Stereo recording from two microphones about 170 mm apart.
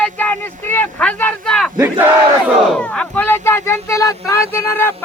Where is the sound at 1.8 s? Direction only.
10° right (ahead or behind).